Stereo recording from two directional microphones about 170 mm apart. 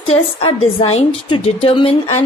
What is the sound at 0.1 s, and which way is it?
A woman's voice, 35° left (ahead or behind).